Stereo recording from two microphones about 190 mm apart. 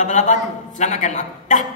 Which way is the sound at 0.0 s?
40° left (ahead or behind).